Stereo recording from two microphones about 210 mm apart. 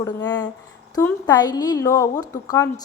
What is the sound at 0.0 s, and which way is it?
A woman's voice, 20° left (ahead or behind).